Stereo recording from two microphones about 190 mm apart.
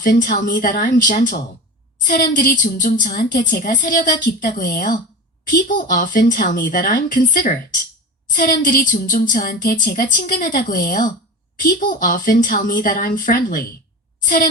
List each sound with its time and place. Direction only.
0.0 s a woman's voice: 45° left (ahead or behind)